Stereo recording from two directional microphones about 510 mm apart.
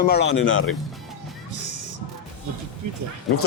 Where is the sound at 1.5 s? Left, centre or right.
Right.